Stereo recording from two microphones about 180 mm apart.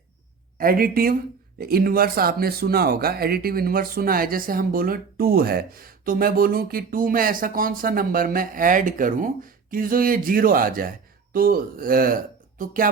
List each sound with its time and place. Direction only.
0.6 s speech: 55° right (ahead or behind)